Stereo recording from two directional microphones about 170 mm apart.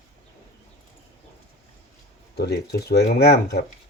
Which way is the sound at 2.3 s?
70° left (ahead or behind).